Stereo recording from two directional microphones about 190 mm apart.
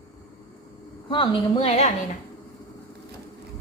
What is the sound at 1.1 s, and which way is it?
Speech, 25° left (ahead or behind).